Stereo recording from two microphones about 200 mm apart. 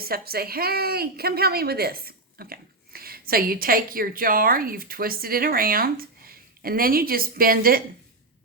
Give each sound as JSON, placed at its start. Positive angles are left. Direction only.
{"t": 0.0, "sound": "a woman's voice", "side_deg": -50}